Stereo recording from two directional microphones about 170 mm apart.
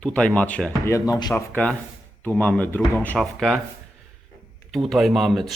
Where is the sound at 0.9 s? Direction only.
25° left (ahead or behind).